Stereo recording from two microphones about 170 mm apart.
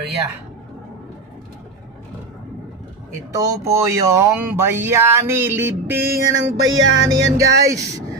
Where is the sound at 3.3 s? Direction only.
20° right (ahead or behind).